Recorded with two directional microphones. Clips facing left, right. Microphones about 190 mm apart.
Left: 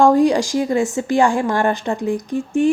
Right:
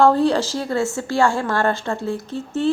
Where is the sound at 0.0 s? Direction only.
15° left (ahead or behind).